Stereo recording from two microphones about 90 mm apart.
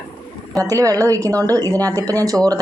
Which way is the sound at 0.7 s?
35° right (ahead or behind).